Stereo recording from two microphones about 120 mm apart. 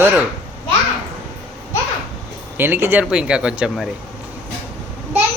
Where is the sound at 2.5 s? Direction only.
20° right (ahead or behind).